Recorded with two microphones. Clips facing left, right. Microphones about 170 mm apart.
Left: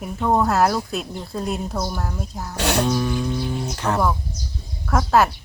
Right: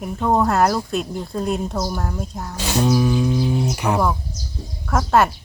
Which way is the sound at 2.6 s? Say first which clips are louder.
Left 2 dB; 65° left (ahead or behind).